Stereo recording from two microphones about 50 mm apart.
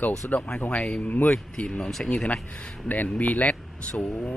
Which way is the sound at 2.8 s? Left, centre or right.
Left.